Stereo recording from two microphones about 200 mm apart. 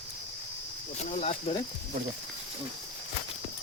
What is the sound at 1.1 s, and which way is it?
Speech, 35° left (ahead or behind).